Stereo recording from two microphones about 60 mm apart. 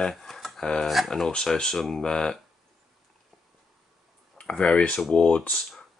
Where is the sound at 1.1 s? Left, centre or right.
Centre.